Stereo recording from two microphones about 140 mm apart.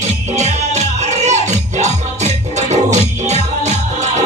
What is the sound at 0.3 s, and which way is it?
Music, 50° right (ahead or behind).